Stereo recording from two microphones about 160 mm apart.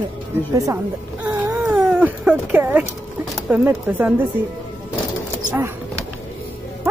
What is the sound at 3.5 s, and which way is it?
Speech, 10° right (ahead or behind).